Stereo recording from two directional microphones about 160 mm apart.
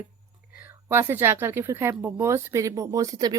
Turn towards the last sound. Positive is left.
turn(degrees=-25)  # may be behind; listen again after turning